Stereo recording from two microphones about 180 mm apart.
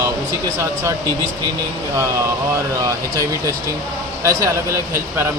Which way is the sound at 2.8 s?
15° right (ahead or behind).